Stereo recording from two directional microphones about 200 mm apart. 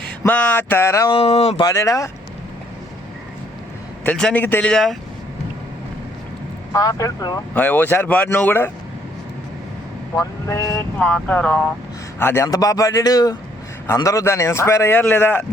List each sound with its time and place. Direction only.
0.2 s a man's voice: 10° left (ahead or behind)
1.1 s speech: 30° left (ahead or behind)
1.6 s a man's voice: 15° left (ahead or behind)
4.0 s a man's voice: 5° left (ahead or behind)
6.7 s a man's voice: 15° left (ahead or behind)
10.2 s a man's voice: 15° left (ahead or behind)